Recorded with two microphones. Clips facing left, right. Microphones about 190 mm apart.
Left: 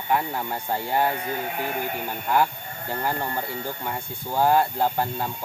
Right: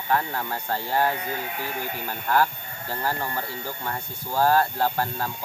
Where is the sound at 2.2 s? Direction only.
15° left (ahead or behind).